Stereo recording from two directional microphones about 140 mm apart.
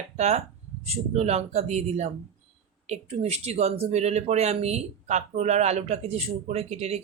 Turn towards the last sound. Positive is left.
turn(degrees=-50)  # may be behind; listen again after turning